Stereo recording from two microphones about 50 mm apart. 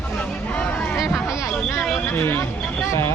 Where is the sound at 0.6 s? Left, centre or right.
Left.